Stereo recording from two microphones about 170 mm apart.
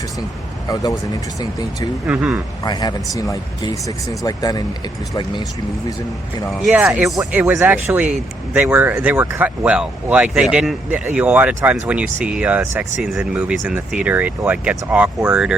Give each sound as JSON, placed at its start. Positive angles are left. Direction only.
{"t": 0.7, "sound": "speech", "side_deg": 20}
{"t": 2.0, "sound": "speech", "side_deg": -5}
{"t": 2.6, "sound": "speech", "side_deg": 20}
{"t": 6.6, "sound": "speech", "side_deg": -5}